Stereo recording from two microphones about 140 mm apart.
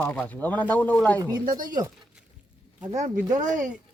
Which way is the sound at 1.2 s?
25° right (ahead or behind).